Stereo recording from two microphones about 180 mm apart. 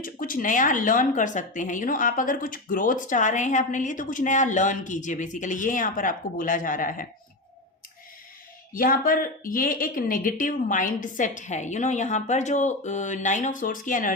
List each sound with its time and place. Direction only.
0.0 s speech: 50° left (ahead or behind)
8.7 s speech: 50° left (ahead or behind)